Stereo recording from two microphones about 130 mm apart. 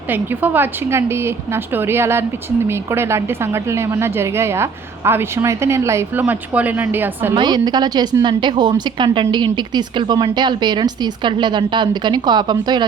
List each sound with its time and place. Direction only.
0.1 s a woman's voice: 15° right (ahead or behind)
7.3 s speech: 35° right (ahead or behind)